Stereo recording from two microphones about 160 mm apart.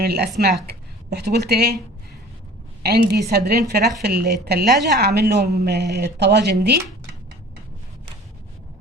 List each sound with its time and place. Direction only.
0.0 s speech: 85° right
2.8 s a woman's voice: 85° right